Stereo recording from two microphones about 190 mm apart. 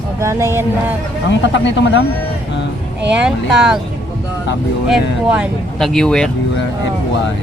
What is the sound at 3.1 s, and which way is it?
Speech, 5° right (ahead or behind).